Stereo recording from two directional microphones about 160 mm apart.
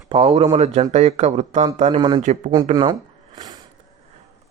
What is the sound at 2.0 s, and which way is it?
Speech, 30° right (ahead or behind).